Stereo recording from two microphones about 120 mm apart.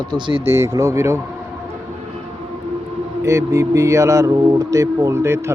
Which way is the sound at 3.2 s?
25° right (ahead or behind).